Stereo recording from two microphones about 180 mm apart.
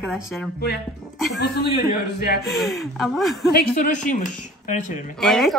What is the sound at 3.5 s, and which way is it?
Speech, 50° left (ahead or behind).